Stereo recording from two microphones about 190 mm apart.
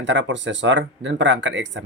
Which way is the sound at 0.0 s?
75° right (ahead or behind).